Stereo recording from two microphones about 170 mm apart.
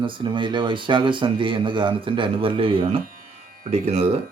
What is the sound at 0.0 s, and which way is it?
Speech, 30° right (ahead or behind).